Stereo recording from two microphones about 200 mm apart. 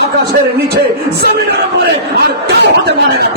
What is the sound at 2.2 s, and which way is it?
Speech, 55° right (ahead or behind).